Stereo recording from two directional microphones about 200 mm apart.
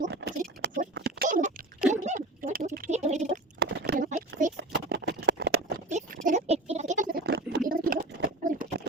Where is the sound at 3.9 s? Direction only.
40° right (ahead or behind).